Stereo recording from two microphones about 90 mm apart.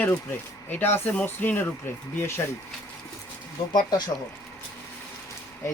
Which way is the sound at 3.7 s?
50° left (ahead or behind).